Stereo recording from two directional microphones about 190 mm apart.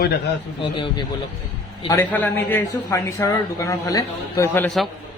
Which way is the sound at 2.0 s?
10° left (ahead or behind).